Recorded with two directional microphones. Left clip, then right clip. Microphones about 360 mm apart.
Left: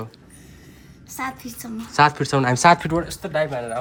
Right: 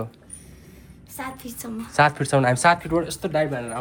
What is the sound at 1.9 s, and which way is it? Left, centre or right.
Speech, centre.